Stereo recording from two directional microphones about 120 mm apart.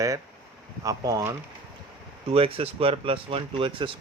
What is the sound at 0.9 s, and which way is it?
Speech, 25° right (ahead or behind).